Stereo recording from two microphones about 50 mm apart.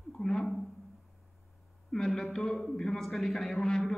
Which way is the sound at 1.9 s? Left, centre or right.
Centre.